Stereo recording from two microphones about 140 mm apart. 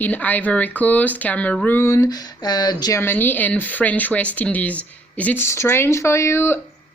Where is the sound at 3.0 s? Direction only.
15° left (ahead or behind).